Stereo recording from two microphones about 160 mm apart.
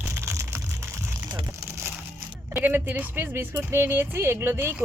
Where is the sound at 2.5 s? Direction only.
10° right (ahead or behind).